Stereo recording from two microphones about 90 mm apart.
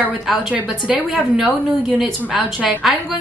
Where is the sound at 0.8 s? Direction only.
10° right (ahead or behind).